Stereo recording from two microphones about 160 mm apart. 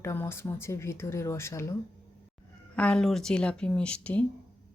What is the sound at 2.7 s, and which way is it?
Speech, 5° left (ahead or behind).